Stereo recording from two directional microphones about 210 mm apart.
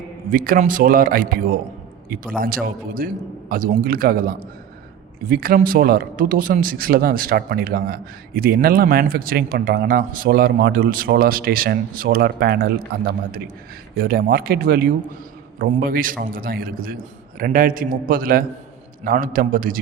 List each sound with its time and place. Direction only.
0.3 s speech: 40° right (ahead or behind)